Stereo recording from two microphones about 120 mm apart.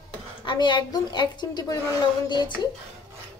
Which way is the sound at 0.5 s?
40° left (ahead or behind).